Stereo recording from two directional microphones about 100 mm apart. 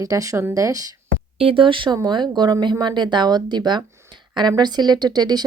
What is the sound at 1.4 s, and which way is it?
Speech, 65° right (ahead or behind).